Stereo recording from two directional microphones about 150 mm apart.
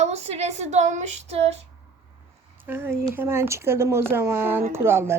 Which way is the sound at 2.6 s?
15° right (ahead or behind).